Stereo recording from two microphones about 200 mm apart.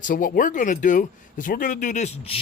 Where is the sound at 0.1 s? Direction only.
45° left (ahead or behind).